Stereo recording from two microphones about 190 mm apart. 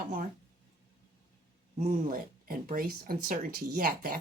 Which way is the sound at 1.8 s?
45° right (ahead or behind).